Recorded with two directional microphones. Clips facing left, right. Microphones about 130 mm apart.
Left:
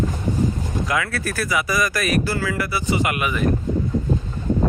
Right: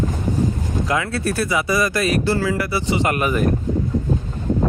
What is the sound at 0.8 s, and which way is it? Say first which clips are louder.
Speech: right 3 dB; 25° right (ahead or behind).